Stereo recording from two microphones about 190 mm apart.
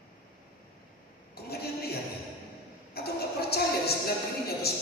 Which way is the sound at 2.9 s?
55° left (ahead or behind).